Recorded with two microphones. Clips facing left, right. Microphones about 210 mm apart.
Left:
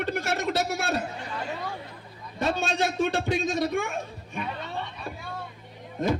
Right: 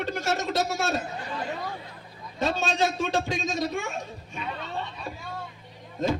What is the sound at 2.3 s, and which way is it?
A man's voice, 55° left (ahead or behind).